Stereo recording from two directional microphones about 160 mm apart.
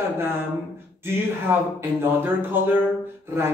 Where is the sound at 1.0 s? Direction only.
15° right (ahead or behind).